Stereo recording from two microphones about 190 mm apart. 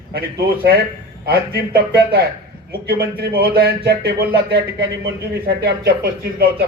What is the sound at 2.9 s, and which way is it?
A man's voice, 55° right (ahead or behind).